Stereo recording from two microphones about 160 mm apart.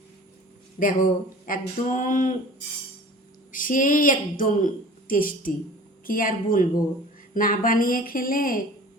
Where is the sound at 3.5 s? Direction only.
55° left (ahead or behind).